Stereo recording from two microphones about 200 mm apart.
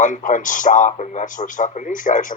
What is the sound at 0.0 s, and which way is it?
Speech, 40° left (ahead or behind).